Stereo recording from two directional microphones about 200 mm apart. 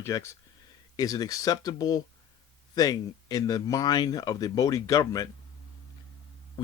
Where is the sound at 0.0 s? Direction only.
15° left (ahead or behind).